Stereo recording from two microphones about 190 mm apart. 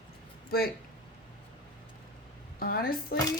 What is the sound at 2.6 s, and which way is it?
Speech, 50° left (ahead or behind).